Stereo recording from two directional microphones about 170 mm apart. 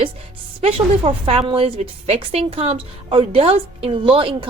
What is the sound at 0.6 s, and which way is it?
A woman's voice, 35° right (ahead or behind).